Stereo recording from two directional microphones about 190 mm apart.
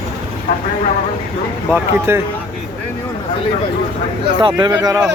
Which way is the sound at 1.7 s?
10° right (ahead or behind).